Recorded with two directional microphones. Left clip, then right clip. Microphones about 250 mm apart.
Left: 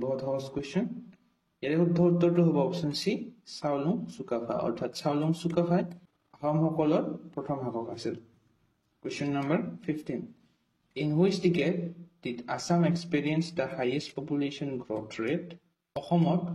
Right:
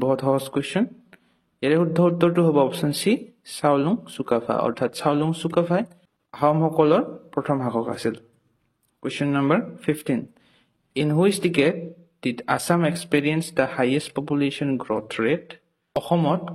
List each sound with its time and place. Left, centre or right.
0.0 s a man's voice: right